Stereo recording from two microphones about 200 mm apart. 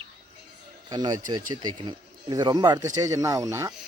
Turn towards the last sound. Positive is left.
turn(degrees=-15)  # may be behind; listen again after turning